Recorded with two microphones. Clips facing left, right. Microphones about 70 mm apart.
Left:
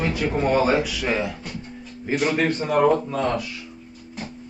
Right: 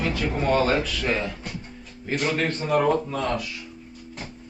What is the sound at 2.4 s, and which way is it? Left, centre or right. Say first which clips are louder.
Speech: left 4 dB; left.